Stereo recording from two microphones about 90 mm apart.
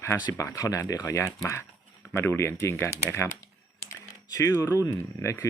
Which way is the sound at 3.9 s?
40° left (ahead or behind).